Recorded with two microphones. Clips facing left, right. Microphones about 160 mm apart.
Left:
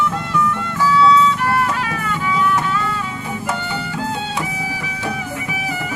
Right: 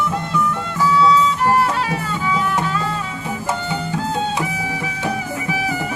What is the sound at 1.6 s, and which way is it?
Music, 30° right (ahead or behind).